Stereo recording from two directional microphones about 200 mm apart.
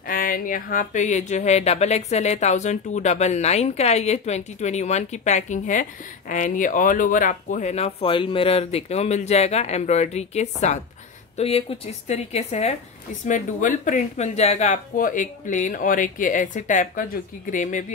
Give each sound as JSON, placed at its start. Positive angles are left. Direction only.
{"t": 0.0, "sound": "speech", "side_deg": 45}